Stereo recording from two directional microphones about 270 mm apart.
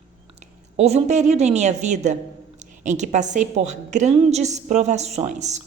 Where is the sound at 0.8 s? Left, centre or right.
Right.